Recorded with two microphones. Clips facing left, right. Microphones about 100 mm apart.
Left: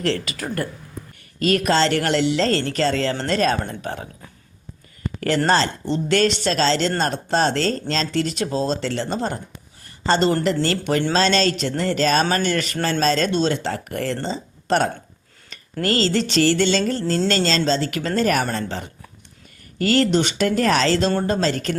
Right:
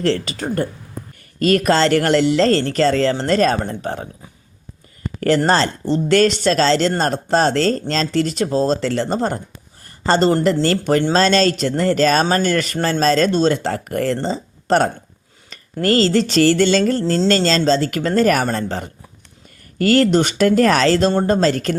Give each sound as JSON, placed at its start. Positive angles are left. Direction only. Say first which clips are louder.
{"t": 0.0, "sound": "speech", "louder": "right 4 dB", "side_deg": -30}
{"t": 1.4, "sound": "speech", "louder": "right 3 dB", "side_deg": -45}
{"t": 5.5, "sound": "speech", "louder": "right 3 dB", "side_deg": -40}